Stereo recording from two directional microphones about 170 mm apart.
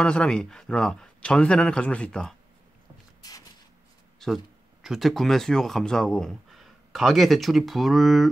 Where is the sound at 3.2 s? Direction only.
20° left (ahead or behind).